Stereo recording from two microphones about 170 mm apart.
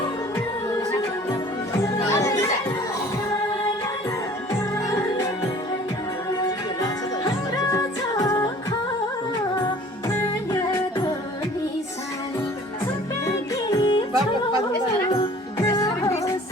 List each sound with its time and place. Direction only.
1.8 s music: 20° left (ahead or behind)
7.5 s music: 20° left (ahead or behind)
13.2 s music: 25° left (ahead or behind)
15.5 s music: 20° left (ahead or behind)